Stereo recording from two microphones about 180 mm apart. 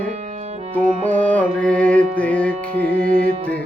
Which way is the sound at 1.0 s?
10° left (ahead or behind).